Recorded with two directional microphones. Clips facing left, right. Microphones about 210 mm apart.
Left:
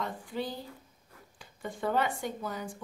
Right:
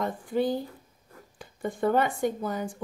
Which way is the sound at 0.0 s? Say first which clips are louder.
Right 8 dB; 50° right (ahead or behind).